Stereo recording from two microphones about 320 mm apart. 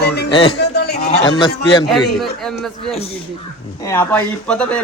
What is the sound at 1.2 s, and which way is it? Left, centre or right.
Speech, centre.